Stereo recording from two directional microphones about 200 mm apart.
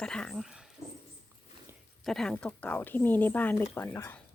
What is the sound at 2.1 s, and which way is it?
Speech, centre (ahead or behind).